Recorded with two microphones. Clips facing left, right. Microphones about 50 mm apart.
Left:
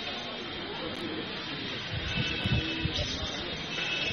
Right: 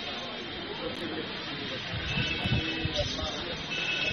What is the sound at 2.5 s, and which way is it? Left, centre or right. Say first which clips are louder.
Music: right 2 dB; centre.